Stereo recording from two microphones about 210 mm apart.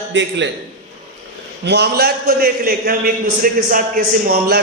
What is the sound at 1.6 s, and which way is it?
A man's voice, 50° right (ahead or behind).